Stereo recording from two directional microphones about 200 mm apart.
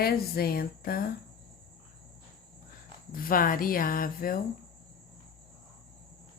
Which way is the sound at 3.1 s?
45° left (ahead or behind).